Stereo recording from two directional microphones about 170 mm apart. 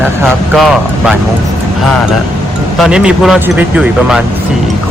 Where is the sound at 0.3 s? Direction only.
Centre (ahead or behind).